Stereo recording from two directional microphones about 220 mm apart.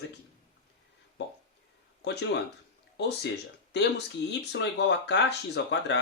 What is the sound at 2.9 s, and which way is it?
Speech, 50° left (ahead or behind).